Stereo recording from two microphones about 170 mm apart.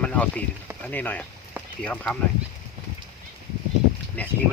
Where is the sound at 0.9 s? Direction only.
10° left (ahead or behind).